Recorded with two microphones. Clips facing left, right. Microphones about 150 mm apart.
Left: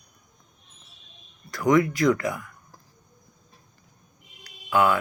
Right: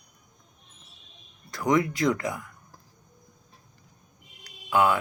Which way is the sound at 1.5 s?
25° right (ahead or behind).